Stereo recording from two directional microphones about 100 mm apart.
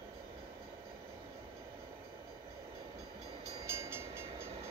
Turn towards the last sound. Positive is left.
turn(degrees=-25)  # may be behind; listen again after turning